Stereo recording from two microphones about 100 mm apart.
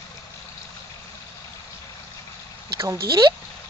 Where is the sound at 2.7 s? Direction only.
30° right (ahead or behind).